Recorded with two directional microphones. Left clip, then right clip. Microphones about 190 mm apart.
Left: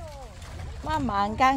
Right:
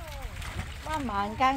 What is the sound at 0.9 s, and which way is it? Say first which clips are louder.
Speech: left 5 dB; 10° left (ahead or behind).